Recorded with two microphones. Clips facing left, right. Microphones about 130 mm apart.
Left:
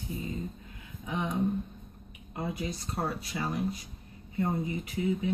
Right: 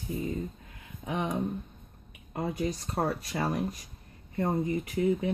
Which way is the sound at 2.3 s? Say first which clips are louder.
Right 4 dB; 45° right (ahead or behind).